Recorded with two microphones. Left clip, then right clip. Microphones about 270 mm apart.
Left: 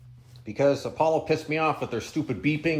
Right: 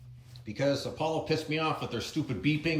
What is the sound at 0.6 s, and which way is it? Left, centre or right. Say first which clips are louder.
Speech: left 7 dB; centre.